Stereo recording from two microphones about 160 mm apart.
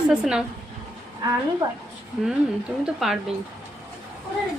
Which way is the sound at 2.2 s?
Centre (ahead or behind).